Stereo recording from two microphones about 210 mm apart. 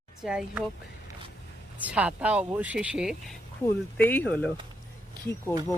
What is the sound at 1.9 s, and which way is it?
Speech, 5° right (ahead or behind).